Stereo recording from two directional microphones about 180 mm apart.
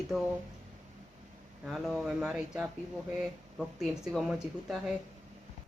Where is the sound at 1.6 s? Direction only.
Centre (ahead or behind).